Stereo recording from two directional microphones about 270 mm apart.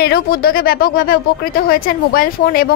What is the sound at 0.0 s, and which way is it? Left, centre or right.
Speech, left.